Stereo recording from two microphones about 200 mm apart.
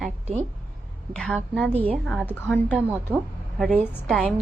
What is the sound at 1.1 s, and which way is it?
Speech, 5° left (ahead or behind).